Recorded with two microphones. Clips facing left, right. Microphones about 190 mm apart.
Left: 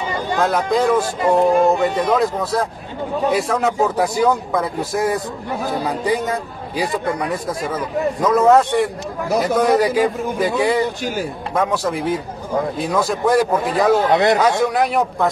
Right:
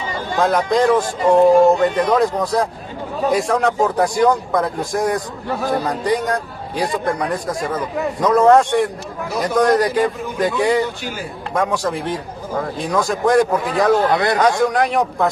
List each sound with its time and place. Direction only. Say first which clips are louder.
0.4 s a man's voice: right 2 dB; centre (ahead or behind)
14.1 s a man's voice: left 3 dB; 20° left (ahead or behind)
14.4 s speech: right 1 dB; 5° left (ahead or behind)